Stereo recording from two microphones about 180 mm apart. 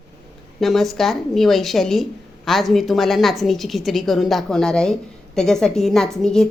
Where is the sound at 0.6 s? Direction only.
Centre (ahead or behind).